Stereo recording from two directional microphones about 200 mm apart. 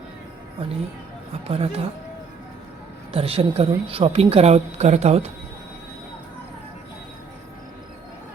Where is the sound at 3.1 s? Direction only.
30° right (ahead or behind).